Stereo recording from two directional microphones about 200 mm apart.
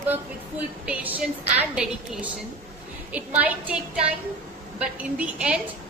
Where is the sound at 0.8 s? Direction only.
10° right (ahead or behind).